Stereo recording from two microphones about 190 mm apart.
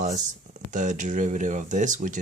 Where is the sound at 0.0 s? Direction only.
40° right (ahead or behind).